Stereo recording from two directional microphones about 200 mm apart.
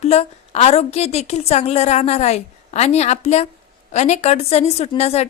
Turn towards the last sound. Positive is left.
turn(degrees=30)  # may be behind; listen again after turning